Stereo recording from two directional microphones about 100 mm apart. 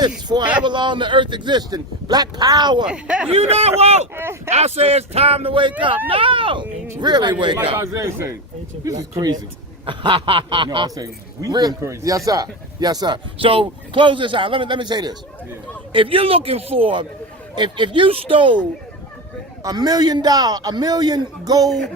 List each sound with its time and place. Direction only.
0.3 s speech: 50° right (ahead or behind)
2.8 s speech: 10° right (ahead or behind)
3.2 s speech: 90° right
4.1 s a man's voice: 25° right (ahead or behind)
4.4 s a man's voice: 90° right; by 7.6 s 50° right (ahead or behind)
7.8 s a man's voice: 30° right (ahead or behind)
9.8 s a man's voice: 60° right (ahead or behind)
10.8 s speech: 35° right (ahead or behind)
13.4 s a man's voice: 65° right (ahead or behind); by 15.1 s 45° right (ahead or behind)
15.9 s a man's voice: 60° right (ahead or behind)
19.6 s speech: 40° right (ahead or behind)